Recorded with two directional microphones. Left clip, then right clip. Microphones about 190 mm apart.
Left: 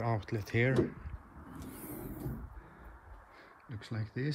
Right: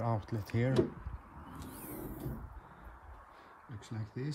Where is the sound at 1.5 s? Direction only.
25° right (ahead or behind).